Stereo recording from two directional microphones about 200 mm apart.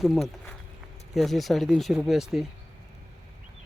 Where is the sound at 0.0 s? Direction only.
Centre (ahead or behind).